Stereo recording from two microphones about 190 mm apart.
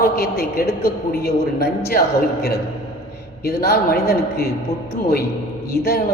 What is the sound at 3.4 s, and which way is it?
A man's voice, 55° left (ahead or behind).